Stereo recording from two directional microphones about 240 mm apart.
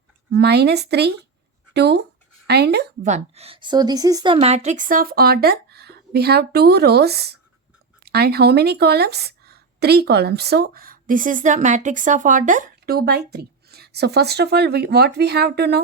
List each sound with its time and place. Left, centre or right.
0.3 s speech: right
3.1 s a woman's voice: right